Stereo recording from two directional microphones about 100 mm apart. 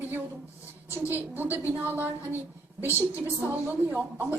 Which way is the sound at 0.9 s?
20° right (ahead or behind).